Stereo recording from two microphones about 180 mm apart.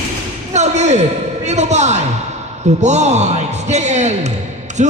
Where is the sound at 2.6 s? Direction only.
40° right (ahead or behind).